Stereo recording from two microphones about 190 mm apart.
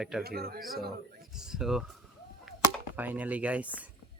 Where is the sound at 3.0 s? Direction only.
10° right (ahead or behind).